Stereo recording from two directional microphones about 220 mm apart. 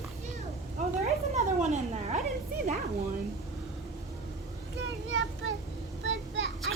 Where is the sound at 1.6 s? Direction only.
30° right (ahead or behind).